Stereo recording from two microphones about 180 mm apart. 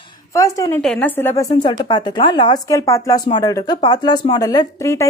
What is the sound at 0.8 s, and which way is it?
Speech, 5° left (ahead or behind).